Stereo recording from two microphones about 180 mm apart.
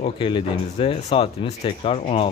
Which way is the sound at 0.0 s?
30° left (ahead or behind).